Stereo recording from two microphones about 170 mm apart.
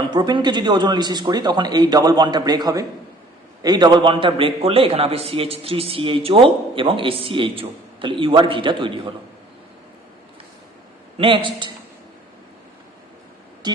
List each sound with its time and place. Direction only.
0.1 s a man's voice: 25° right (ahead or behind)
11.2 s speech: 30° right (ahead or behind)
13.6 s a sound: 25° right (ahead or behind)